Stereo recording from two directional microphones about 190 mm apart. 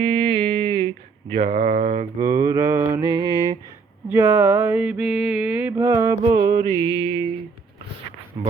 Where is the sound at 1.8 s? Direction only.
30° right (ahead or behind).